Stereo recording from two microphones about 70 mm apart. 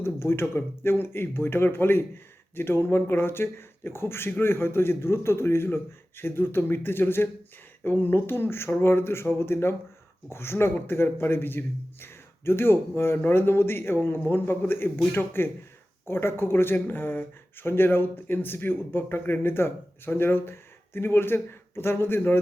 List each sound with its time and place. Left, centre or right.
0.0 s a man's voice: left